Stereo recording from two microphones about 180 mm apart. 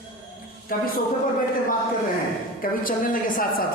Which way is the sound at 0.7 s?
50° left (ahead or behind).